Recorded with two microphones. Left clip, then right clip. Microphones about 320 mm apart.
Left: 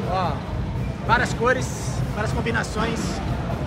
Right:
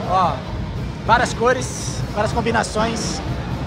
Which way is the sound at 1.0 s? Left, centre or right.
Centre.